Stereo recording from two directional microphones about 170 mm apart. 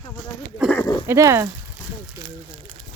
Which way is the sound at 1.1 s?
15° right (ahead or behind).